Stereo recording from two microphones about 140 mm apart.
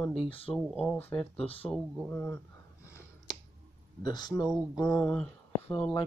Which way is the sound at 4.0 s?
30° left (ahead or behind).